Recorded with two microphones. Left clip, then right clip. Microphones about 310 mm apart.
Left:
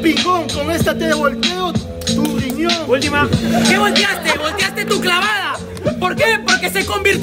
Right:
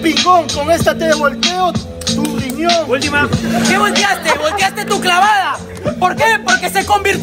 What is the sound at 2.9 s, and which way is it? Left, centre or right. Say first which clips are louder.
Speech: even; left.